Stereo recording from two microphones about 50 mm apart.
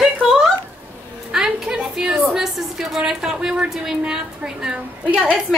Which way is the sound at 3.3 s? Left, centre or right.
Centre.